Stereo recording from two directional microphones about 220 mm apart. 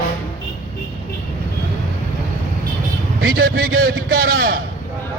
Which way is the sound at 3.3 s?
40° right (ahead or behind).